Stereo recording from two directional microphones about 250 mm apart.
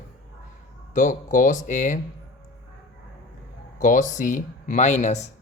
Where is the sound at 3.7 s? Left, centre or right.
Left.